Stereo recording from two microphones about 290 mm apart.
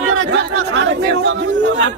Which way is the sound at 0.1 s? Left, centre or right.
Right.